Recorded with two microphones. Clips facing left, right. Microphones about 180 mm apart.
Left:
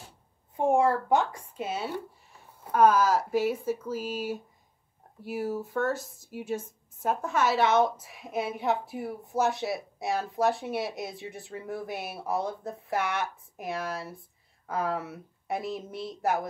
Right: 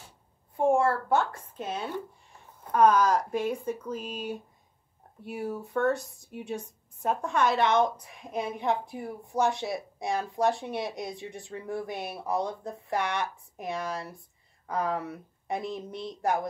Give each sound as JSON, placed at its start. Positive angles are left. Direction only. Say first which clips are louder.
{"t": 0.6, "sound": "a woman's voice", "louder": "even", "side_deg": 15}